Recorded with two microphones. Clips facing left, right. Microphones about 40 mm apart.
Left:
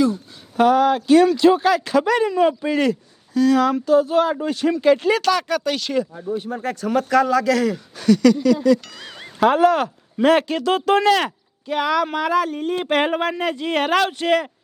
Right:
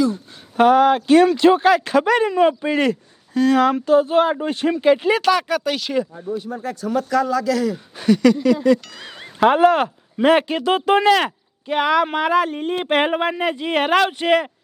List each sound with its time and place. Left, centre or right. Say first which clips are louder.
0.1 s speech: left 1 dB; right; by 6.0 s centre
6.3 s a man's voice: left 1 dB; left
7.9 s speech: even; right